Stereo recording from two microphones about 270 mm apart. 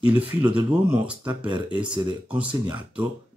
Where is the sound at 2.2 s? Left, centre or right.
Centre.